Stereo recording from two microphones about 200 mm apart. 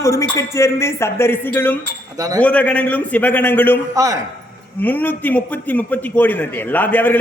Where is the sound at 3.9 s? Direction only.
15° right (ahead or behind).